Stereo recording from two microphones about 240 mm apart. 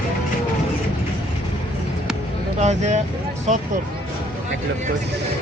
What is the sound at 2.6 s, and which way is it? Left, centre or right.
Speech, right.